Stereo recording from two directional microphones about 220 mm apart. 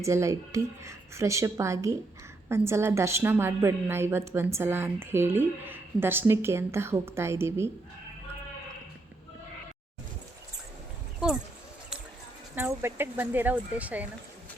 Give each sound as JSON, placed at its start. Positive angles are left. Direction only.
{"t": 0.0, "sound": "a woman's voice", "side_deg": -15}
{"t": 12.5, "sound": "a woman's voice", "side_deg": -10}